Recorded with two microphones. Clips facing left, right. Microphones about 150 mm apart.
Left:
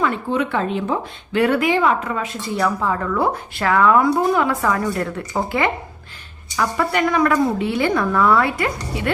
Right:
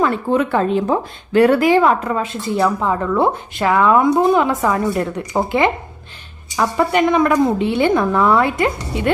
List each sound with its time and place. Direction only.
0.0 s a woman's voice: 45° right (ahead or behind); by 9.1 s 20° right (ahead or behind)